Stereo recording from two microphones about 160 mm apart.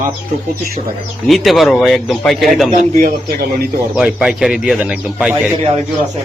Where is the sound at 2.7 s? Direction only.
50° right (ahead or behind).